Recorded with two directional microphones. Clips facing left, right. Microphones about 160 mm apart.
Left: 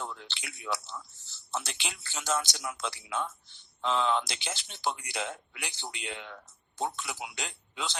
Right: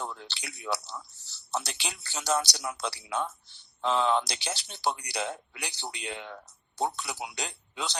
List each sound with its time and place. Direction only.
0.0 s a man's voice: 35° right (ahead or behind)